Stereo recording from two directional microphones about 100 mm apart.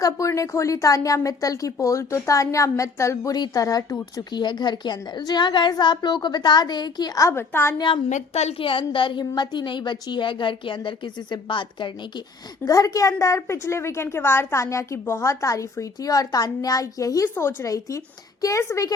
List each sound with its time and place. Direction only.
0.0 s a woman's voice: 35° left (ahead or behind)
7.3 s a woman's voice: 25° left (ahead or behind)
8.3 s a woman's voice: 90° left; by 11.9 s 55° left (ahead or behind)
12.6 s a woman's voice: 35° left (ahead or behind)